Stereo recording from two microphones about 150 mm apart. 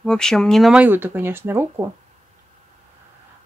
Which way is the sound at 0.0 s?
5° left (ahead or behind).